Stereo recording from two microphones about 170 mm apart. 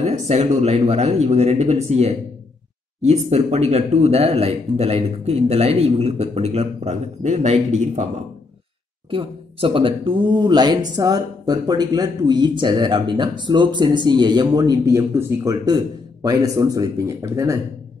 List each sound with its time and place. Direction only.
0.0 s speech: 40° right (ahead or behind)
9.1 s speech: 30° right (ahead or behind); by 17.6 s 15° right (ahead or behind)